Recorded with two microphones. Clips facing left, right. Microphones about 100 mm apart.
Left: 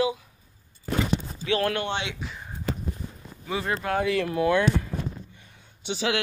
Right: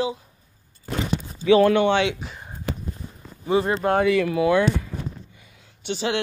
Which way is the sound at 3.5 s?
30° right (ahead or behind).